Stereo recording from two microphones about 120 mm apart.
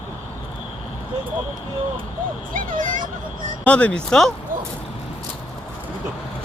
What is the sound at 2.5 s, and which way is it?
Speech, 90° right.